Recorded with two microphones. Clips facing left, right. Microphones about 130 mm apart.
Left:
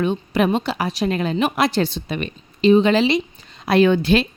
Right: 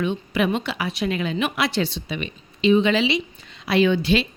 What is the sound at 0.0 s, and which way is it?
A woman's voice, 40° left (ahead or behind).